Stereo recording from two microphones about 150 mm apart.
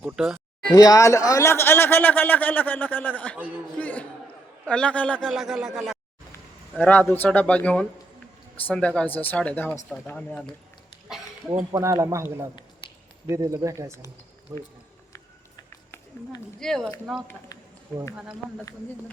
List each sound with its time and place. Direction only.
0.0 s speech: 5° right (ahead or behind)
0.7 s speech: 25° left (ahead or behind); by 5.3 s 10° left (ahead or behind)
5.3 s speech: 5° right (ahead or behind)
6.3 s speech: 10° left (ahead or behind)
11.7 s speech: 20° right (ahead or behind)
16.6 s speech: 5° left (ahead or behind)